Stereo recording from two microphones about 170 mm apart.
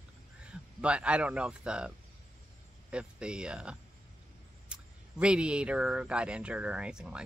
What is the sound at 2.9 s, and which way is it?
Speech, 5° right (ahead or behind).